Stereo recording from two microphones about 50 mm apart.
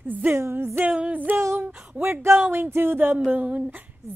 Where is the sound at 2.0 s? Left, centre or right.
Right.